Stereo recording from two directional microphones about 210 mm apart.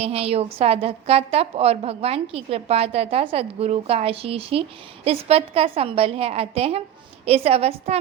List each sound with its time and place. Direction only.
0.0 s a woman's voice: 30° right (ahead or behind)